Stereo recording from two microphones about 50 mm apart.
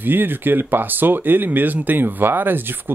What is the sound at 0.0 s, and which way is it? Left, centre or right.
Speech, right.